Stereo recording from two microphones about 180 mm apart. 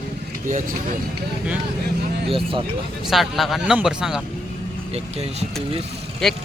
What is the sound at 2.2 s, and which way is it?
Speech, 30° right (ahead or behind).